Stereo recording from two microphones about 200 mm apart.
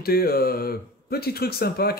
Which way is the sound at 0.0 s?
50° left (ahead or behind).